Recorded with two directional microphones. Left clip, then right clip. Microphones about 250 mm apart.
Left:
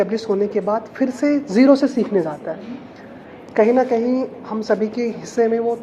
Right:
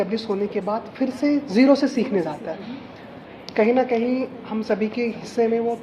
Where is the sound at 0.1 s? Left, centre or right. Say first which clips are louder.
Left 4 dB; centre.